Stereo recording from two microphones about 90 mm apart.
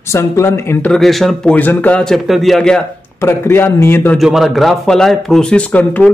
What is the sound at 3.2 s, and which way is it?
Speech, 25° left (ahead or behind).